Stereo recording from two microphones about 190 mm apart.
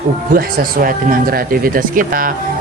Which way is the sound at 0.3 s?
50° right (ahead or behind).